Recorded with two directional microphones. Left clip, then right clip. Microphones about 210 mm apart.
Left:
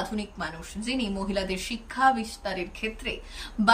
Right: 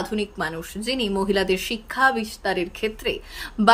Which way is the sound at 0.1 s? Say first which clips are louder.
Right 8 dB; 15° right (ahead or behind).